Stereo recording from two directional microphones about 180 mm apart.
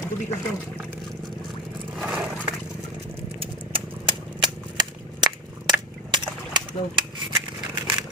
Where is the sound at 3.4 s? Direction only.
30° right (ahead or behind).